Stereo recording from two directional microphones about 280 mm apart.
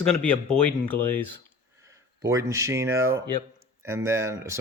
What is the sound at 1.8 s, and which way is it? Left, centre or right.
Speech, centre.